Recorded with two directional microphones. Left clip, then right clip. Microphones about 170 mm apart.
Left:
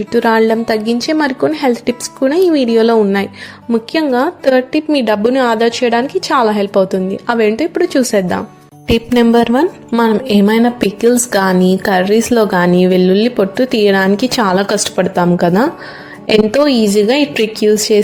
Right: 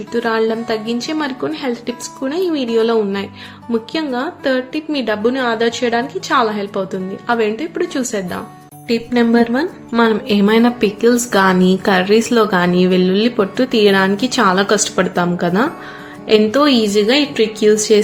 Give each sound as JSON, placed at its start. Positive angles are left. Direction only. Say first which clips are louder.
{"t": 0.1, "sound": "a woman's voice", "louder": "left 5 dB", "side_deg": 40}
{"t": 9.9, "sound": "a woman's voice", "louder": "even", "side_deg": 30}